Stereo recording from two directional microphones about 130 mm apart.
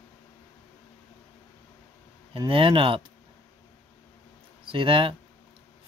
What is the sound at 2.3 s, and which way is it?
Speech, 45° right (ahead or behind).